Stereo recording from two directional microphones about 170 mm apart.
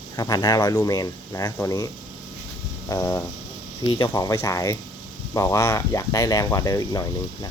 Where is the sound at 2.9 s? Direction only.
20° left (ahead or behind).